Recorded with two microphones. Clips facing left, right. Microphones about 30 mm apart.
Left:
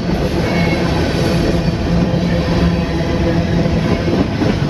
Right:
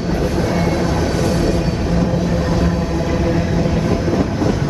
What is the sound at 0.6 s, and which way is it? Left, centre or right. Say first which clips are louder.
Train: left 2 dB; left.